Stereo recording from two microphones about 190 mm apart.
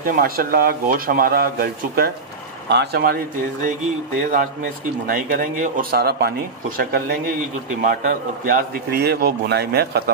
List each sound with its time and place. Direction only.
0.0 s a man's voice: 50° right (ahead or behind)
5.0 s a man's voice: 50° right (ahead or behind)